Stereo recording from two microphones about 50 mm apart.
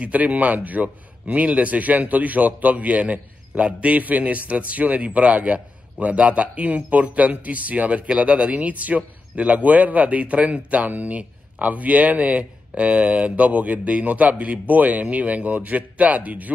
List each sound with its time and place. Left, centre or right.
0.0 s a man's voice: right